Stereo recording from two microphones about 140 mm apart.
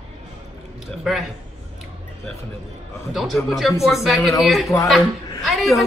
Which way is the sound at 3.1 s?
Centre (ahead or behind).